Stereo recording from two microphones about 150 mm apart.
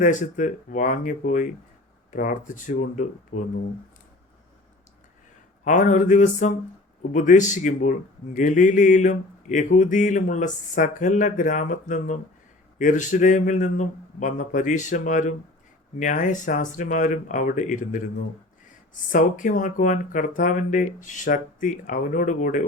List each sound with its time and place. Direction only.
0.0 s a man's voice: 55° left (ahead or behind)
2.0 s a man's voice: 65° left (ahead or behind)
5.6 s a man's voice: 55° left (ahead or behind)
19.1 s a man's voice: 60° left (ahead or behind)